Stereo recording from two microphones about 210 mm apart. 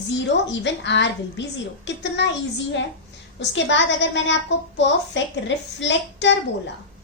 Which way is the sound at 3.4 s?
60° left (ahead or behind).